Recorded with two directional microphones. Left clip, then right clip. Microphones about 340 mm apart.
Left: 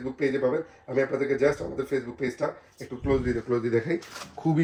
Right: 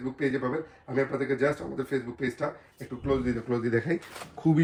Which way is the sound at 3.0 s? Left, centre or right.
Centre.